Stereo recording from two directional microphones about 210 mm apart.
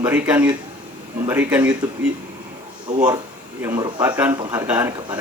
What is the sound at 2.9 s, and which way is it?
Speech, 35° right (ahead or behind).